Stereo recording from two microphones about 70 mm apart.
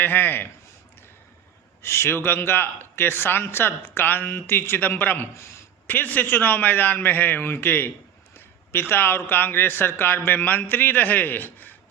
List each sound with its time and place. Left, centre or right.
0.0 s a man's voice: left
1.8 s a man's voice: left